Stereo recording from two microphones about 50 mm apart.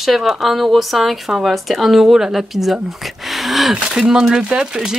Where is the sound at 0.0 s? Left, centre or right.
Centre.